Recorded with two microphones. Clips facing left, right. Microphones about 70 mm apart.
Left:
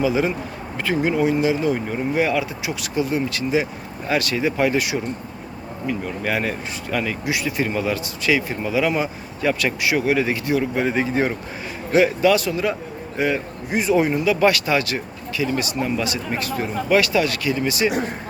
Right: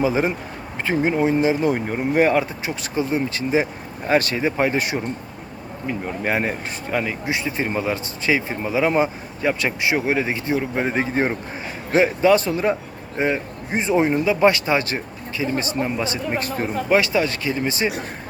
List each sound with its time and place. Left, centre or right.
0.0 s speech: right
1.6 s speech: right